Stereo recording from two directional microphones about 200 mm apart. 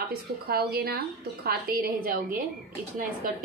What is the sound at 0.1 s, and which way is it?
A woman's voice, 50° right (ahead or behind).